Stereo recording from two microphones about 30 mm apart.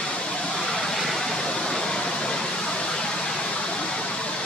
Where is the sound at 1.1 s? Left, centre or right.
Centre.